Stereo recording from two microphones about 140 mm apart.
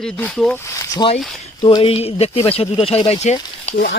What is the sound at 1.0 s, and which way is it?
Speech, 35° left (ahead or behind).